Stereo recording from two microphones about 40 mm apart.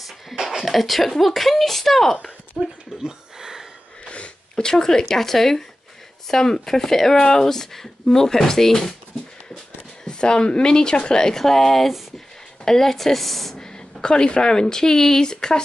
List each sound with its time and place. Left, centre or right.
0.0 s a sound: centre
0.7 s speech: centre
3.0 s a sound: centre
4.0 s sneeze: left
4.6 s speech: centre
10.0 s speech: left; by 13.6 s centre
13.6 s speech: centre